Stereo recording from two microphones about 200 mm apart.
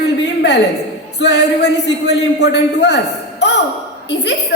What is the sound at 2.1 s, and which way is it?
A man's voice, 60° left (ahead or behind).